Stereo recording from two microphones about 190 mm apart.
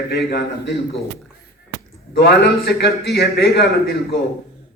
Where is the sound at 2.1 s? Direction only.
55° left (ahead or behind).